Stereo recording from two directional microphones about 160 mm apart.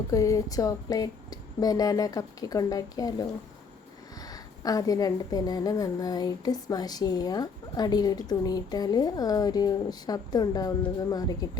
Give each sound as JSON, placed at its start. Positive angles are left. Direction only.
{"t": 0.1, "sound": "a woman's voice", "side_deg": 20}